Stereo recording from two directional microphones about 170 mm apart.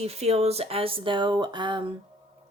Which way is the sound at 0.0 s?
40° right (ahead or behind).